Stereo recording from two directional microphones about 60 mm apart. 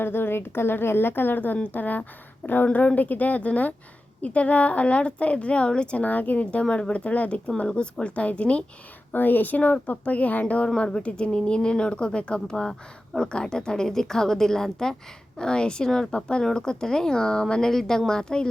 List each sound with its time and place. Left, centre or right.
0.0 s a woman's voice: left; by 8.6 s centre
9.1 s a woman's voice: left
10.8 s a woman's voice: centre